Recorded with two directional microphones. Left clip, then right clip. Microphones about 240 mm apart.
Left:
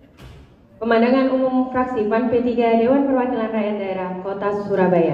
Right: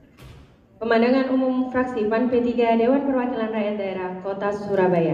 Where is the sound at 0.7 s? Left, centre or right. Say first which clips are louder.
Left 3 dB; right.